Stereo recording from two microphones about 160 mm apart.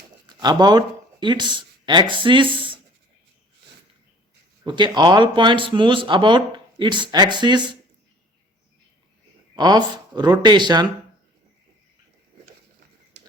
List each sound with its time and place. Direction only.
0.4 s speech: 25° right (ahead or behind)
4.6 s speech: 30° right (ahead or behind)
9.6 s speech: 25° right (ahead or behind)